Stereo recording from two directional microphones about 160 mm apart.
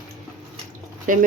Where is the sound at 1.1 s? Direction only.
55° right (ahead or behind).